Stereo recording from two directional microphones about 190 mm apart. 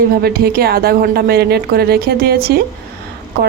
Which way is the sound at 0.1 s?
55° right (ahead or behind).